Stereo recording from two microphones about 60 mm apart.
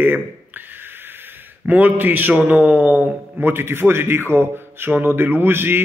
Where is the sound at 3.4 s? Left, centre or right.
Right.